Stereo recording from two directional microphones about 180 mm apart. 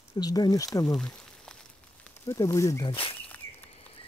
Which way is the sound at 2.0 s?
15° left (ahead or behind).